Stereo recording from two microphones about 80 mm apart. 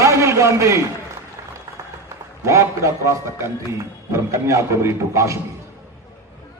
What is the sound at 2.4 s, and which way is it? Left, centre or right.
A man's voice, right.